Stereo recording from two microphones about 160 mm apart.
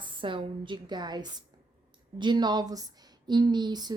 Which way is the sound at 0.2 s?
30° right (ahead or behind).